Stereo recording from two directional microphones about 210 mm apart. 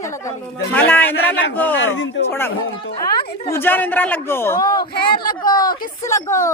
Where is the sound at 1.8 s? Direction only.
65° left (ahead or behind).